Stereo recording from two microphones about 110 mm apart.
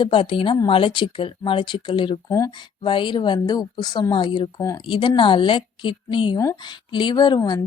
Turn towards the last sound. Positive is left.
turn(degrees=40)  # may be behind; listen again after turning